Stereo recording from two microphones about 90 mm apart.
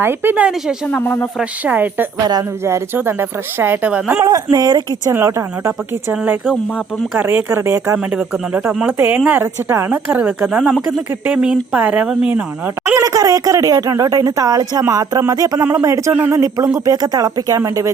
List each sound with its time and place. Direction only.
0.0 s speech: 25° right (ahead or behind)
0.9 s speech: 20° left (ahead or behind)
1.6 s speech: 20° right (ahead or behind)
3.9 s speech: 10° right (ahead or behind)
4.5 s speech: 45° right (ahead or behind)
8.1 s speech: 15° right (ahead or behind)
9.9 s speech: 20° right (ahead or behind)
10.6 s speech: centre (ahead or behind)
11.3 s speech: 15° right (ahead or behind)
13.0 s speech: 40° right (ahead or behind)